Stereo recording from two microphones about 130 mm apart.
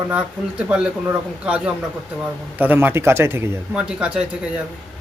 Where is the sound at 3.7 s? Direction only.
10° right (ahead or behind).